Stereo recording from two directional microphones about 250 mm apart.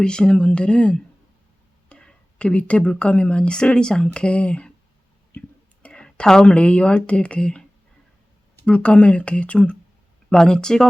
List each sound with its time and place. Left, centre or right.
0.0 s a woman's voice: centre
5.8 s a woman's voice: centre
8.6 s speech: centre